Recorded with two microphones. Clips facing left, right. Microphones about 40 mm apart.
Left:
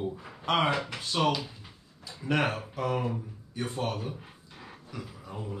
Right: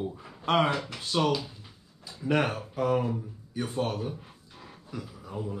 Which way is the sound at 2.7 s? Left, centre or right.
Centre.